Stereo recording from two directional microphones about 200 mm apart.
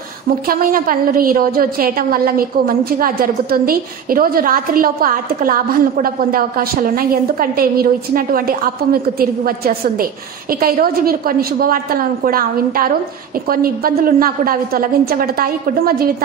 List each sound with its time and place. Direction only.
0.5 s a woman's voice: 45° right (ahead or behind)